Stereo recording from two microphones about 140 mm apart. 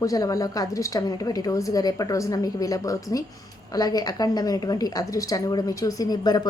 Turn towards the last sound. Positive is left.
turn(degrees=30)  # may be behind; listen again after turning